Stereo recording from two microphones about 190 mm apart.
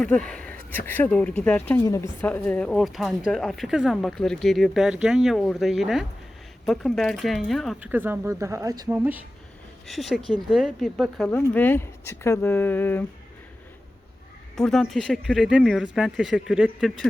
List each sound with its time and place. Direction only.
0.0 s speech: 5° left (ahead or behind)
14.5 s speech: 5° left (ahead or behind)